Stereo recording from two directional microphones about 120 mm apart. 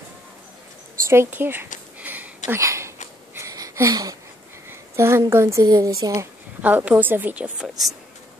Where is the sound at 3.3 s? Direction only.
30° right (ahead or behind).